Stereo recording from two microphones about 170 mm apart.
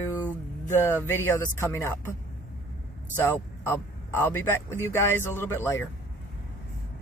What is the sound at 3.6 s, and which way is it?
Speech, 15° left (ahead or behind).